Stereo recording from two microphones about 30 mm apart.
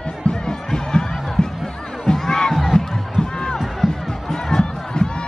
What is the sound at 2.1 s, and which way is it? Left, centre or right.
Crowd, left.